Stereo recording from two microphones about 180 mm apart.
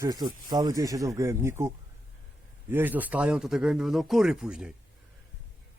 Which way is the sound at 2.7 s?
10° right (ahead or behind).